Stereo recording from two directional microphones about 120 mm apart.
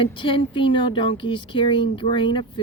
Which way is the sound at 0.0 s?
45° left (ahead or behind).